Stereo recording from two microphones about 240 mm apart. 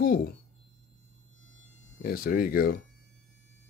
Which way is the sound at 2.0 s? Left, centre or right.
Left.